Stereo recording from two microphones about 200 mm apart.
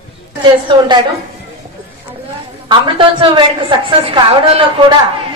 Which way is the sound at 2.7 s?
25° right (ahead or behind).